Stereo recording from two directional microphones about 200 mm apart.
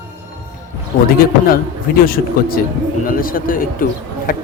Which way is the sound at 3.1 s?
45° left (ahead or behind).